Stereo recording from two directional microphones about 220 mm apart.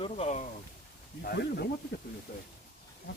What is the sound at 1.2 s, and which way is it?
Speech, 45° left (ahead or behind).